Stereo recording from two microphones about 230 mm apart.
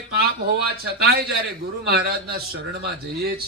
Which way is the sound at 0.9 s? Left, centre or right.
Right.